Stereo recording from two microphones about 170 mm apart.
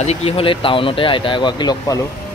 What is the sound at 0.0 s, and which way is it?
Speech, 35° left (ahead or behind).